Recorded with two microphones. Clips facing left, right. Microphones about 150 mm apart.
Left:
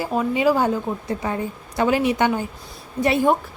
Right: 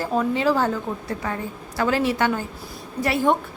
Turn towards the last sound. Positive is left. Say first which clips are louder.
# left 3 dB
turn(degrees=20)  # may be behind; listen again after turning